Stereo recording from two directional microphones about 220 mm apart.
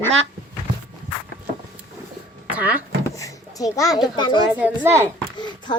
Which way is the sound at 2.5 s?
5° right (ahead or behind).